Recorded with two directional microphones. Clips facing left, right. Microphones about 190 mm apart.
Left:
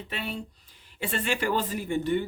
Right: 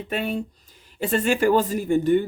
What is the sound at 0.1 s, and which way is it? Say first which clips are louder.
Speech: right 9 dB; 50° right (ahead or behind).